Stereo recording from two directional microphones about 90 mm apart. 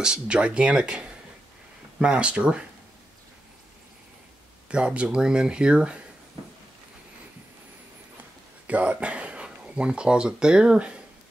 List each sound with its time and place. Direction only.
0.0 s speech: 10° right (ahead or behind)
4.6 s speech: 10° right (ahead or behind)
8.6 s speech: 15° right (ahead or behind)